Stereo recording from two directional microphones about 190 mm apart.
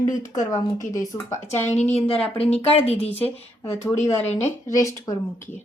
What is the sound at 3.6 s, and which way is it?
Speech, 15° left (ahead or behind).